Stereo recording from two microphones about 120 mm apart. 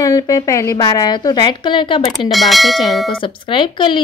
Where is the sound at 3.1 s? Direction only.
45° left (ahead or behind).